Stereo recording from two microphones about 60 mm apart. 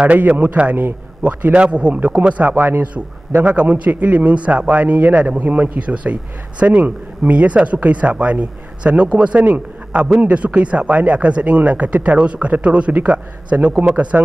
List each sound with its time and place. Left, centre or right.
0.0 s speech: right